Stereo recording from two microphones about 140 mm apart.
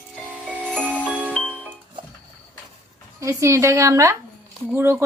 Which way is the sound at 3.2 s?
20° right (ahead or behind).